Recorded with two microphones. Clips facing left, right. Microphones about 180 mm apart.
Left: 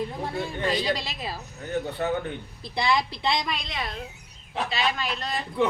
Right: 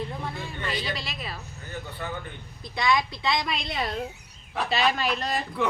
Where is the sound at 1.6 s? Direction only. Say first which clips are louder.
Left 9 dB; 70° left (ahead or behind).